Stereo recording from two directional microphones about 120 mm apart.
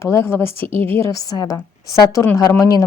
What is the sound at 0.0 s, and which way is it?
A woman's voice, 25° left (ahead or behind).